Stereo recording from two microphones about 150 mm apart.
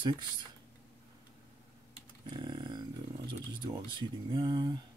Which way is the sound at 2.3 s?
30° right (ahead or behind).